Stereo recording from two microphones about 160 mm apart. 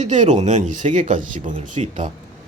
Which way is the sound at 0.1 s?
50° right (ahead or behind).